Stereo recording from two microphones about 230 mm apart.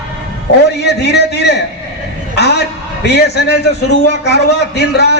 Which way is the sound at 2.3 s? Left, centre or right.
Left.